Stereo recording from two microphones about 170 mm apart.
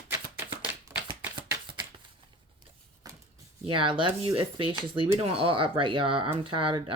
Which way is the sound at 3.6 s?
30° right (ahead or behind).